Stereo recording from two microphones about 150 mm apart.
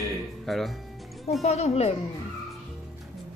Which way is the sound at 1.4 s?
45° left (ahead or behind).